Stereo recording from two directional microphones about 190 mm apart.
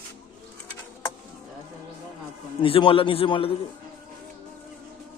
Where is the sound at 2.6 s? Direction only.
30° left (ahead or behind).